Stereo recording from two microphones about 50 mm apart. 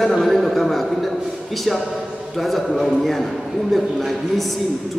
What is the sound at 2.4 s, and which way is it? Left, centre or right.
Speech, centre.